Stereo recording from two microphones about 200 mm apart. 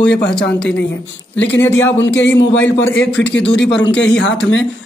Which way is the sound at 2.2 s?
60° left (ahead or behind).